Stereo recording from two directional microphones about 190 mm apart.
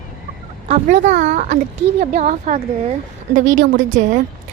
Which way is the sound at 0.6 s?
40° right (ahead or behind).